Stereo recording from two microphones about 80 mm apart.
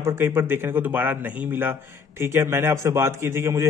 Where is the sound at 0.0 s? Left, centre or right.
Right.